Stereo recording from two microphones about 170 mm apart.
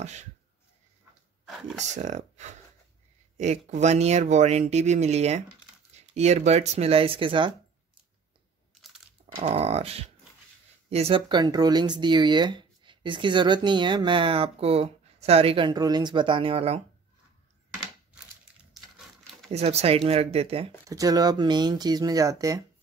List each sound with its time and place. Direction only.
0.0 s a sound: 40° right (ahead or behind)
1.4 s a sound: centre (ahead or behind)
2.0 s speech: 45° right (ahead or behind)
9.2 s speech: 35° right (ahead or behind)
18.7 s crumpling: centre (ahead or behind)
19.5 s speech: 40° right (ahead or behind)
20.9 s speech: 20° right (ahead or behind)